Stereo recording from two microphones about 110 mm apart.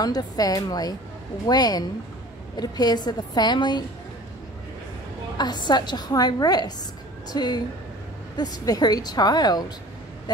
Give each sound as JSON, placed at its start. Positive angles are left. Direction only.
{"t": 0.0, "sound": "a woman's voice", "side_deg": 35}
{"t": 5.4, "sound": "a woman's voice", "side_deg": 40}